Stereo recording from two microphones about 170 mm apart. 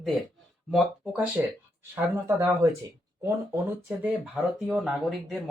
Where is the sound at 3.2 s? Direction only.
15° right (ahead or behind).